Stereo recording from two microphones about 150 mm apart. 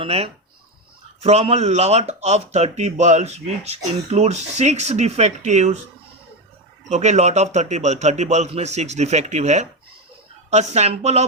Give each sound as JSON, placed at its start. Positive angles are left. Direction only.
{"t": 0.0, "sound": "speech", "side_deg": -45}
{"t": 6.8, "sound": "speech", "side_deg": -50}